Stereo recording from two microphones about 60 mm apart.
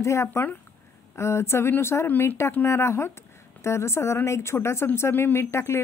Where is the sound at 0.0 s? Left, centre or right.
Left.